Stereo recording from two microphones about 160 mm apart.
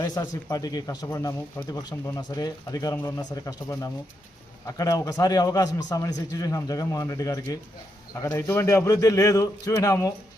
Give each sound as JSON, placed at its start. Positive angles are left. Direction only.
{"t": 0.0, "sound": "a man's voice", "side_deg": 20}